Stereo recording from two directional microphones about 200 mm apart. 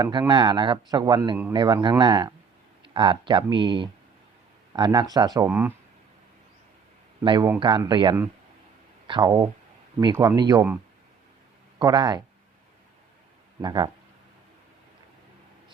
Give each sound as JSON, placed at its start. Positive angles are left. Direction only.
{"t": 0.0, "sound": "a man's voice", "side_deg": -20}
{"t": 7.2, "sound": "a man's voice", "side_deg": -20}
{"t": 11.8, "sound": "a man's voice", "side_deg": -20}
{"t": 13.6, "sound": "a man's voice", "side_deg": -20}